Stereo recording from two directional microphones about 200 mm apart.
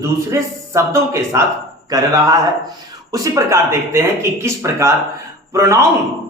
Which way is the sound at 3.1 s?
15° right (ahead or behind).